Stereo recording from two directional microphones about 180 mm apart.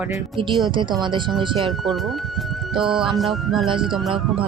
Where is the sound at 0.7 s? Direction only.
25° right (ahead or behind).